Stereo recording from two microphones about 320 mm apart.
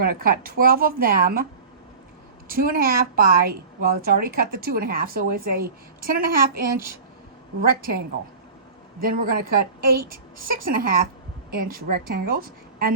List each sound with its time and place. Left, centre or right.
0.0 s a woman's voice: right
2.5 s a woman's voice: right
7.6 s a woman's voice: right